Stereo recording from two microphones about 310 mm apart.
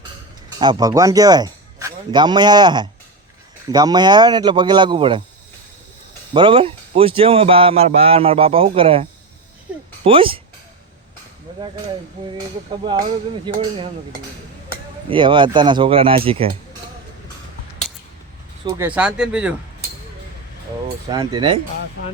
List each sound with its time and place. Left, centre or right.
0.6 s speech: centre
6.3 s speech: centre
12.7 s speech: centre
15.1 s speech: centre
18.6 s speech: centre
21.1 s speech: centre